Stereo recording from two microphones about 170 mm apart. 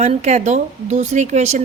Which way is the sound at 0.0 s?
40° right (ahead or behind).